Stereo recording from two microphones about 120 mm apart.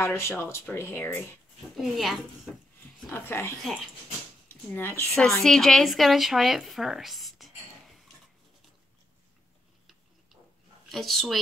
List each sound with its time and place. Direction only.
0.0 s speech: 20° left (ahead or behind)
1.8 s speech: centre (ahead or behind)
3.1 s speech: 20° left (ahead or behind)
4.7 s speech: 20° left (ahead or behind)
5.1 s a woman's voice: centre (ahead or behind)
10.9 s speech: centre (ahead or behind)